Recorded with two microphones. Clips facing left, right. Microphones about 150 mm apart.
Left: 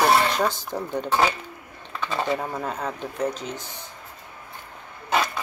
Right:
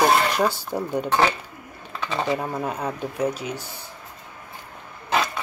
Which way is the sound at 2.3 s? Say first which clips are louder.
Right 2 dB; 10° right (ahead or behind).